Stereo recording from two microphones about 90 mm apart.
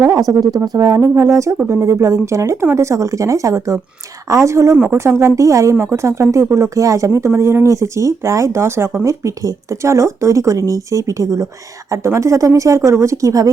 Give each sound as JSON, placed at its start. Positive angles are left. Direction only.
{"t": 0.0, "sound": "speech", "side_deg": -40}